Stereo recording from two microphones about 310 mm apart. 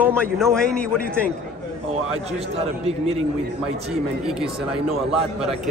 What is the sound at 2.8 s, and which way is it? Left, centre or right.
Speech, centre.